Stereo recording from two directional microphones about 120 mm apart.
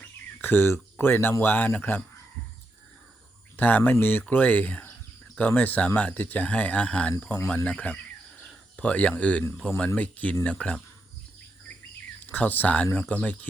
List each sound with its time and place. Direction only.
0.0 s speech: 15° left (ahead or behind)
3.6 s speech: 15° left (ahead or behind)
12.2 s speech: 15° left (ahead or behind)